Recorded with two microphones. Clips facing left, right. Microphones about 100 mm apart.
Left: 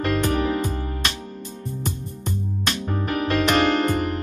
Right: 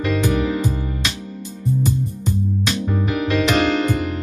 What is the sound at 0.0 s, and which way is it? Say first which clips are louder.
Music: right 2 dB; 50° left (ahead or behind).